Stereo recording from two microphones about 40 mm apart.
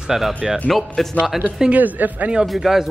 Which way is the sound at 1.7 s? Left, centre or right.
Right.